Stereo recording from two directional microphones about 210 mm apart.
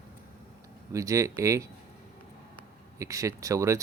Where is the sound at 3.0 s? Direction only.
15° right (ahead or behind).